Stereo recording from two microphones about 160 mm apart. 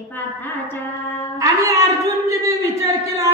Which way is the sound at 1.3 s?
20° right (ahead or behind).